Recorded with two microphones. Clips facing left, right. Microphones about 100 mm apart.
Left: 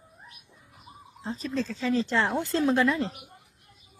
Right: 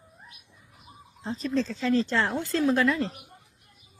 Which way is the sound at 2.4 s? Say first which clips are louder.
Right 1 dB; 25° left (ahead or behind).